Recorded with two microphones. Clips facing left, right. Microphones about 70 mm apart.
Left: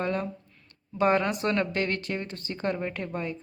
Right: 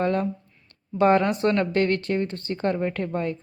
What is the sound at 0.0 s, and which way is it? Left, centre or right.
Speech, right.